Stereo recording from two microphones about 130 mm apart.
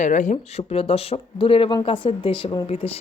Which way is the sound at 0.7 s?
50° left (ahead or behind).